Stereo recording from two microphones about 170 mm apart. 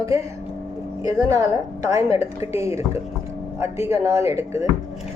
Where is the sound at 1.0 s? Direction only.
20° right (ahead or behind).